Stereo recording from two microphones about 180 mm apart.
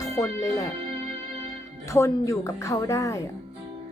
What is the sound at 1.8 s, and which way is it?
Speech, 15° left (ahead or behind).